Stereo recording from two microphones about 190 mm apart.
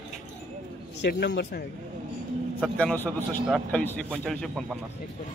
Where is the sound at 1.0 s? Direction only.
65° left (ahead or behind).